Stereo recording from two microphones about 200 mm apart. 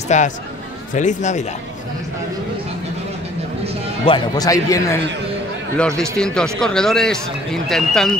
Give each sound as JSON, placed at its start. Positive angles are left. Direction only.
{"t": 0.1, "sound": "speech", "side_deg": 35}
{"t": 4.0, "sound": "speech", "side_deg": 20}
{"t": 5.8, "sound": "speech", "side_deg": 5}